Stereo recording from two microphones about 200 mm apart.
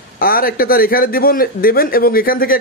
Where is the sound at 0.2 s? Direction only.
45° left (ahead or behind).